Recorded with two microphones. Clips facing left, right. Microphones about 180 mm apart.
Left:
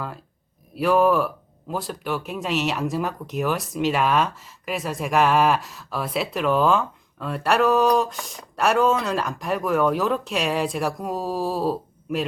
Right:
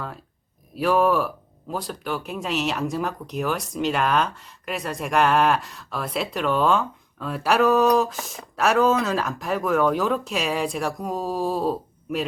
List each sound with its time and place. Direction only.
0.8 s speech: centre (ahead or behind)